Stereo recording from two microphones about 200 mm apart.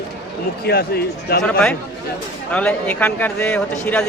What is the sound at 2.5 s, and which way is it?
A man's voice, 5° left (ahead or behind).